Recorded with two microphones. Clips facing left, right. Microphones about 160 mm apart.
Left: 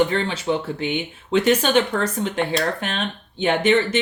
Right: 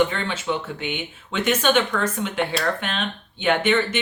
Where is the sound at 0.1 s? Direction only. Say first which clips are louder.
Left 4 dB; 35° left (ahead or behind).